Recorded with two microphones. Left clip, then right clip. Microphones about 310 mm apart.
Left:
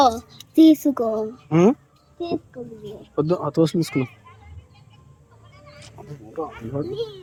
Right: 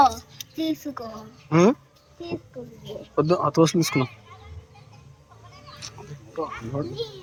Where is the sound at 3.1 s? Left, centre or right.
Centre.